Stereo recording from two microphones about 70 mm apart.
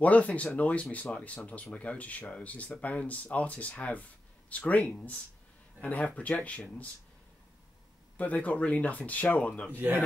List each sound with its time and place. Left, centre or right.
0.0 s speech: left
8.2 s speech: left